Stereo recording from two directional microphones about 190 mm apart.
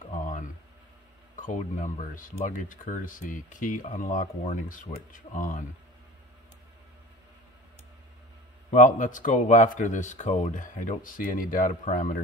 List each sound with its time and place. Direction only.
0.1 s a sound: 40° left (ahead or behind)
1.3 s speech: 45° left (ahead or behind)
8.7 s speech: 40° left (ahead or behind)